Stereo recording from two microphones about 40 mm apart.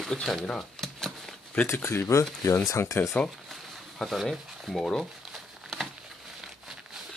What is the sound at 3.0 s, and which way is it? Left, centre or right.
Speech, left.